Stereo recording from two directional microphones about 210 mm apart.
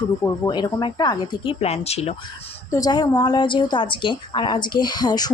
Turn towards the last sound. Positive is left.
turn(degrees=20)  # may be behind; listen again after turning